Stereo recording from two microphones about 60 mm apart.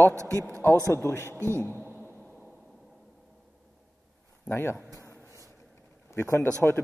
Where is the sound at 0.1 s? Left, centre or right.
Right.